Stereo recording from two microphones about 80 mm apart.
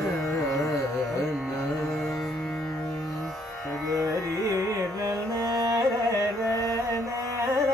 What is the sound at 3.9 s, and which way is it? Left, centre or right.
Carnatic music, right.